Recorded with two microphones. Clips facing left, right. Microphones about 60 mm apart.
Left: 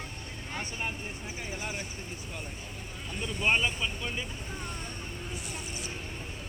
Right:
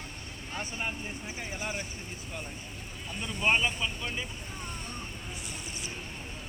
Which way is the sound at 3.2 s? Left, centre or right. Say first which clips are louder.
Even; centre.